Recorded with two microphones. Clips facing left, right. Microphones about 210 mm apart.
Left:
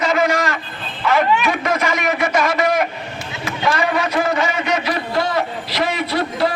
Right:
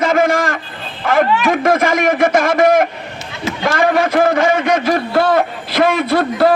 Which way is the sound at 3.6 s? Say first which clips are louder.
Right 5 dB; 50° right (ahead or behind).